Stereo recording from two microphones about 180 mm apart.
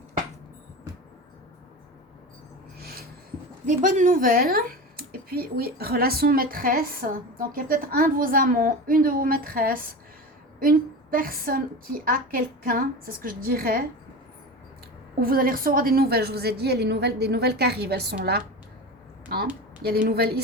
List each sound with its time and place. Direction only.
2.7 s a sound: 60° right (ahead or behind)
3.7 s a woman's voice: 45° right (ahead or behind)
15.2 s a woman's voice: 55° right (ahead or behind)
19.8 s a woman's voice: 60° right (ahead or behind)